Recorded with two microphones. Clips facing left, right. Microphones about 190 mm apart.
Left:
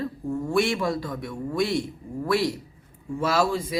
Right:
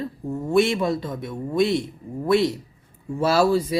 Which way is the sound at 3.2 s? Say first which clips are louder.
Right 5 dB; 35° right (ahead or behind).